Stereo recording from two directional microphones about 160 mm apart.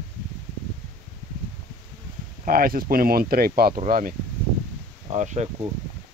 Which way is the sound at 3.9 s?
60° right (ahead or behind).